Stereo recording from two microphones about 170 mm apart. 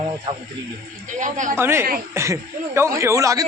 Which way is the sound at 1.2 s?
45° right (ahead or behind).